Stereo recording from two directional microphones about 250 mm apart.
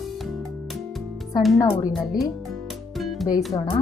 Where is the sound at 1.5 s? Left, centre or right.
Centre.